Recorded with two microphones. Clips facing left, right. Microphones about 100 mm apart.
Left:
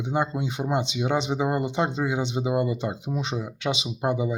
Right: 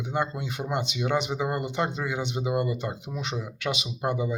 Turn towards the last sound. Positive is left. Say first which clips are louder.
# left 3 dB
turn(degrees=15)  # may be behind; listen again after turning